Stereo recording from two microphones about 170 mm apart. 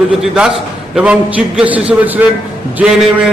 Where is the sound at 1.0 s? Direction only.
5° right (ahead or behind).